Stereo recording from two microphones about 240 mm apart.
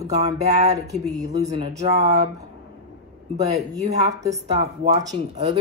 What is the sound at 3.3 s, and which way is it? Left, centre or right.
Speech, right.